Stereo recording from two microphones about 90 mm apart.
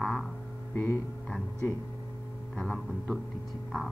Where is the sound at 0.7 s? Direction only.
25° left (ahead or behind).